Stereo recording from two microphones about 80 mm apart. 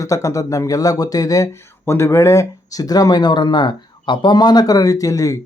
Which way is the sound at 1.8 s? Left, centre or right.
Left.